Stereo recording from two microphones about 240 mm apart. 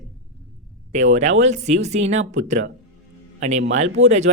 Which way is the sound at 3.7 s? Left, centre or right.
Right.